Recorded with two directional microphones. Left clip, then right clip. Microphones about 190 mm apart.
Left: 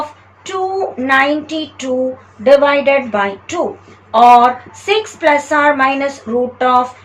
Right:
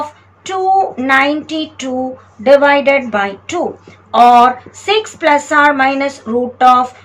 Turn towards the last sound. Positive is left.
turn(degrees=-15)  # may be behind; listen again after turning